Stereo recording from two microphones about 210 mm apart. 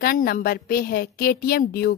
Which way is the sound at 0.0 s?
45° left (ahead or behind).